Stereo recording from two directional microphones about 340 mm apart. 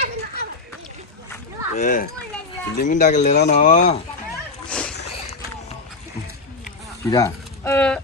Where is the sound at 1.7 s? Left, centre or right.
Left.